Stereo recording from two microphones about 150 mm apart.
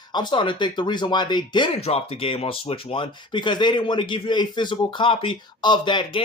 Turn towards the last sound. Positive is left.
turn(degrees=30)  # may be behind; listen again after turning